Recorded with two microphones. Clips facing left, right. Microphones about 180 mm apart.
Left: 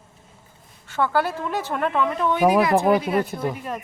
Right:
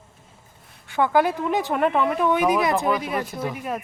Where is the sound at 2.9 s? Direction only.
30° left (ahead or behind).